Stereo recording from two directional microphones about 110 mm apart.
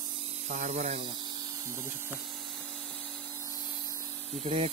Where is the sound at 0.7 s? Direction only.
90° right.